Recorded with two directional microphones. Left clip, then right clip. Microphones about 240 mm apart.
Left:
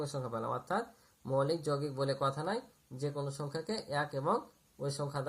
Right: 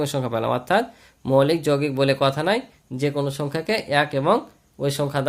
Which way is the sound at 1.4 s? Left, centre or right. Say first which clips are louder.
Right 14 dB; right.